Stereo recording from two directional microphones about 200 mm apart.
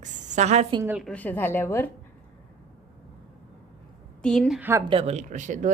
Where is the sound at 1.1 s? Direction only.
10° left (ahead or behind).